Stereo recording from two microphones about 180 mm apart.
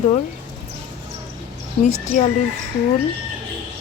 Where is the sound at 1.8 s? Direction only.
40° left (ahead or behind).